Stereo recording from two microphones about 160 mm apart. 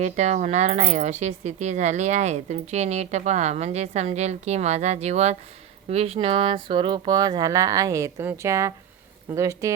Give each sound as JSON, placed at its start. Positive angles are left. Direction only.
{"t": 0.0, "sound": "speech", "side_deg": -45}